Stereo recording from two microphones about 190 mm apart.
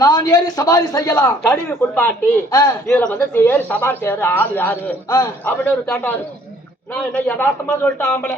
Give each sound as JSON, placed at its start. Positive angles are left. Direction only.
{"t": 0.0, "sound": "a man's voice", "side_deg": 20}